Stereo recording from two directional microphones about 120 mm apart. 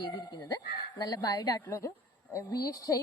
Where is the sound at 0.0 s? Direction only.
35° left (ahead or behind).